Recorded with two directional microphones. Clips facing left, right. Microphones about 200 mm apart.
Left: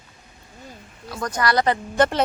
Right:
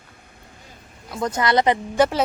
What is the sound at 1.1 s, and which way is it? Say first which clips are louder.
Speech: right 2 dB; 25° right (ahead or behind).